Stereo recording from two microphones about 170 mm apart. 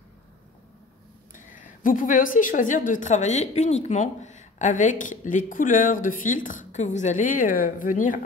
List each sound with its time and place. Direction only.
1.3 s a woman's voice: 50° left (ahead or behind)